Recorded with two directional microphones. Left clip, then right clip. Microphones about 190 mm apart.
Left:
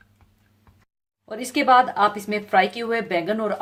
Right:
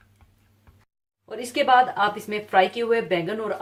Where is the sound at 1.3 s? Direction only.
50° left (ahead or behind).